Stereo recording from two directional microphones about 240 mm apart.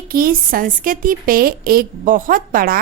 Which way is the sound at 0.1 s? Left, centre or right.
Right.